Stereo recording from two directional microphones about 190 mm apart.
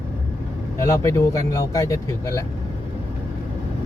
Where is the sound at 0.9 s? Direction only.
15° left (ahead or behind).